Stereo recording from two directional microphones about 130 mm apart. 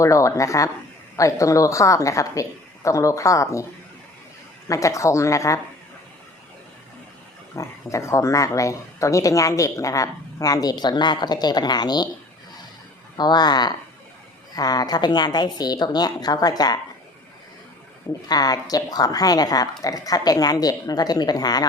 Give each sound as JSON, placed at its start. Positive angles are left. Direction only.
{"t": 0.0, "sound": "speech", "side_deg": 25}
{"t": 4.7, "sound": "speech", "side_deg": 25}
{"t": 7.5, "sound": "speech", "side_deg": 25}
{"t": 13.1, "sound": "a woman's voice", "side_deg": 30}
{"t": 18.3, "sound": "speech", "side_deg": 30}